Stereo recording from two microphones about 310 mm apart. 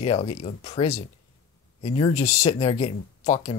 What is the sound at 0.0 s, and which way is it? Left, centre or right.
Speech, centre.